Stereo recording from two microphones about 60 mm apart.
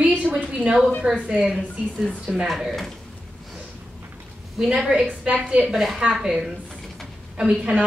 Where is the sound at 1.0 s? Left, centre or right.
Centre.